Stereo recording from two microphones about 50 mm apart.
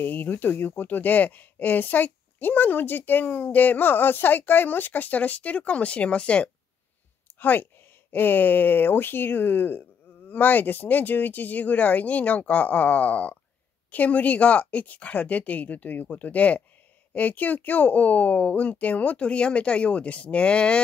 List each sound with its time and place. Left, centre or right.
0.0 s speech: left
7.3 s a woman's voice: left